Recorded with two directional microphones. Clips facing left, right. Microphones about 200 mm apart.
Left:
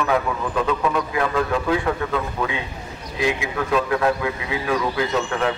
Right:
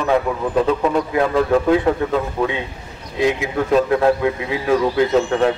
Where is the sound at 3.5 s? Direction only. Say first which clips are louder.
Right 7 dB; 30° right (ahead or behind).